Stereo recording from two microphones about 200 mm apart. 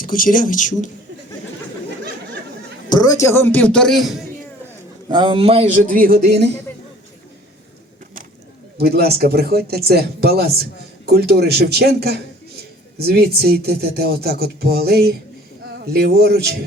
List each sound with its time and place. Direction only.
0.0 s speech: 45° left (ahead or behind)
2.9 s a man's voice: 20° left (ahead or behind); by 4.3 s centre (ahead or behind)
5.0 s a man's voice: 20° right (ahead or behind); by 6.5 s 55° right (ahead or behind)
8.8 s speech: 50° right (ahead or behind)